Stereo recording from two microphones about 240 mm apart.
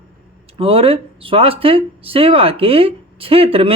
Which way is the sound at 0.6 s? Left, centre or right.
Right.